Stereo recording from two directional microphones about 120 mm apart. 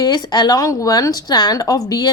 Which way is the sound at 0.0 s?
35° left (ahead or behind).